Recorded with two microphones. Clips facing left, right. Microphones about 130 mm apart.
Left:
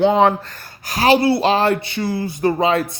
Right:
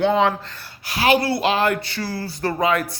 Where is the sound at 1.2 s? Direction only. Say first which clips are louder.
Left 4 dB; 25° left (ahead or behind).